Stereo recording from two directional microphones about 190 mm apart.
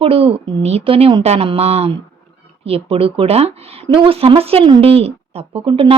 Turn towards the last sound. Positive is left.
turn(degrees=-25)  # may be behind; listen again after turning